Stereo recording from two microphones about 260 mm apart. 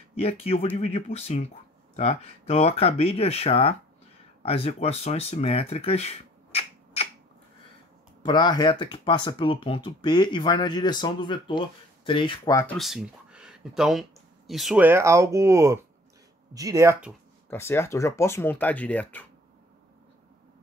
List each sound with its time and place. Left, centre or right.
0.1 s speech: left
8.2 s speech: centre
17.5 s speech: centre